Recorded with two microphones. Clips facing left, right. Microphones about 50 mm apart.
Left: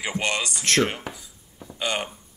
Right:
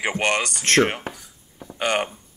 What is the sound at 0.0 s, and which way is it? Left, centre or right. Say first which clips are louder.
A man's voice: right 4 dB; right.